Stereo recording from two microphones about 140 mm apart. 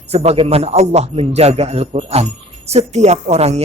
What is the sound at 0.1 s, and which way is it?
A man's voice, 45° right (ahead or behind).